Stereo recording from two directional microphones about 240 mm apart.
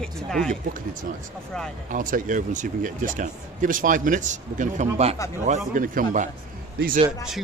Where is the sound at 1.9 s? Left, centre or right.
Right.